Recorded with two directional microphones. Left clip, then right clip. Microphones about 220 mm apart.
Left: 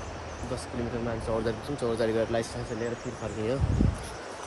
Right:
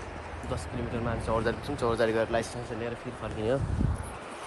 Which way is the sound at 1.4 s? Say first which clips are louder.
Right 1 dB; centre (ahead or behind).